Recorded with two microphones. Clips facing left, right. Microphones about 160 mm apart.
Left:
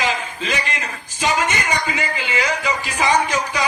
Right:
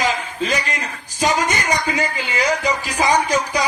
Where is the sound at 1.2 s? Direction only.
40° right (ahead or behind).